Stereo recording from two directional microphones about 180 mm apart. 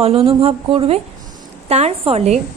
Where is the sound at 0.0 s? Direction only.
30° right (ahead or behind).